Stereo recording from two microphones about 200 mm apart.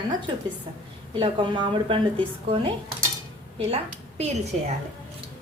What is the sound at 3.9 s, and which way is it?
Speech, 35° right (ahead or behind).